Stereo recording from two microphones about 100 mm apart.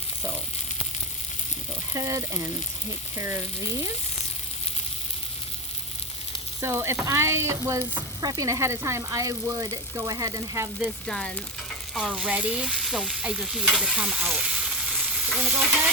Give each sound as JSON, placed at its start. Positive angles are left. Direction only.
{"t": 1.9, "sound": "speech", "side_deg": -30}
{"t": 3.2, "sound": "frying", "side_deg": -25}
{"t": 6.6, "sound": "frying", "side_deg": -30}
{"t": 8.2, "sound": "speech", "side_deg": -35}
{"t": 11.0, "sound": "speech", "side_deg": 5}
{"t": 11.9, "sound": "stir", "side_deg": -5}